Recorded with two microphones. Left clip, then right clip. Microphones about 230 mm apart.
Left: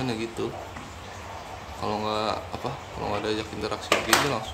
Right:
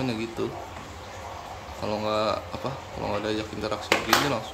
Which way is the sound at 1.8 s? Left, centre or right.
Centre.